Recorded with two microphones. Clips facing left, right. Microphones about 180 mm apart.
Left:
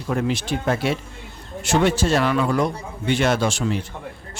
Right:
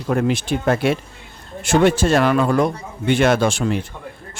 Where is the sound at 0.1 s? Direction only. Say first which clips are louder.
Right 4 dB; 55° right (ahead or behind).